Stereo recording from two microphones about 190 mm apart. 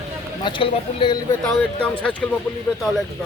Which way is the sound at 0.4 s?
25° left (ahead or behind).